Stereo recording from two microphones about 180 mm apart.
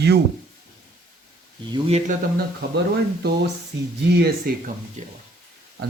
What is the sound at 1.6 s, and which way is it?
Speech, 30° right (ahead or behind).